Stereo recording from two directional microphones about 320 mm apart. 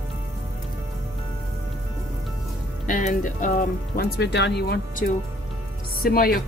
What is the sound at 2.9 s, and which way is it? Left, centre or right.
Speech, left.